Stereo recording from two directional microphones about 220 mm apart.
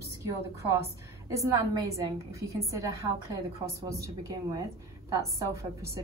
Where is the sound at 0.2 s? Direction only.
15° right (ahead or behind).